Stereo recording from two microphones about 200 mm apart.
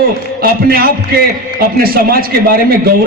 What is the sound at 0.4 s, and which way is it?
A man's voice, 50° right (ahead or behind).